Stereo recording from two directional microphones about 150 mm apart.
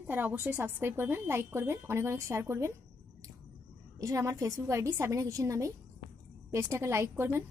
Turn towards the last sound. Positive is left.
turn(degrees=-15)  # may be behind; listen again after turning